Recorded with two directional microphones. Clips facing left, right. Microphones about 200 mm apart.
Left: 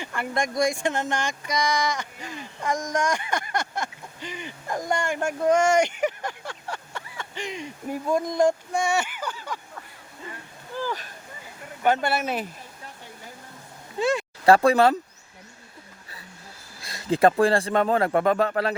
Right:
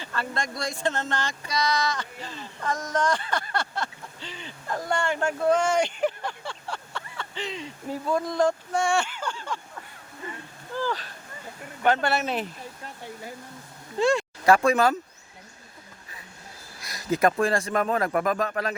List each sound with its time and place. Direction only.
0.0 s speech: 15° left (ahead or behind)
10.8 s a sound: 15° left (ahead or behind)
11.8 s speech: 10° left (ahead or behind)
14.1 s speech: 30° left (ahead or behind)
16.8 s speech: 25° left (ahead or behind)